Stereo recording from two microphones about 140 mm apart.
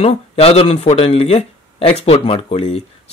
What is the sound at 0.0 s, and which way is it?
Speech, 45° left (ahead or behind).